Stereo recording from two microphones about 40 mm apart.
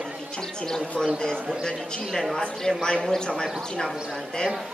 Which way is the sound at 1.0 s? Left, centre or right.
Centre.